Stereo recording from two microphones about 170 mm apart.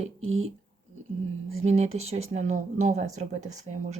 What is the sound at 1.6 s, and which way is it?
Speech, 40° right (ahead or behind).